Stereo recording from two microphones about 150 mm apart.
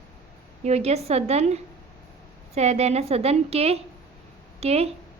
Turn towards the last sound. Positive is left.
turn(degrees=-45)  # may be behind; listen again after turning